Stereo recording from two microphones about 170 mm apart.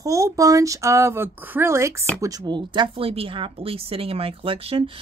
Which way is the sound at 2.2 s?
25° right (ahead or behind).